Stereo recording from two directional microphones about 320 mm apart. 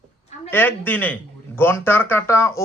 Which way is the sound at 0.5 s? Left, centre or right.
Centre.